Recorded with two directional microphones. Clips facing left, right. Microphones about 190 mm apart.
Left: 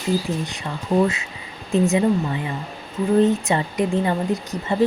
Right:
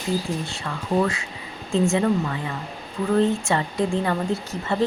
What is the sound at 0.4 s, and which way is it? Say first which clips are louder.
Speech: left 2 dB; 20° left (ahead or behind).